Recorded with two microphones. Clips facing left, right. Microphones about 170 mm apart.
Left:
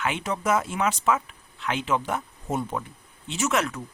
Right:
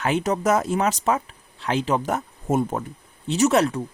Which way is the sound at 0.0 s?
40° right (ahead or behind).